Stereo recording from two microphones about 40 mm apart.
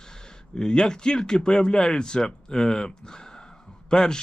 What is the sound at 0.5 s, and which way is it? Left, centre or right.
Speech, centre.